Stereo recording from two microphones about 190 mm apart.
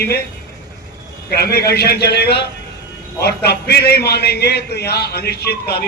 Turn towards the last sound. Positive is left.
turn(degrees=55)  # may be behind; listen again after turning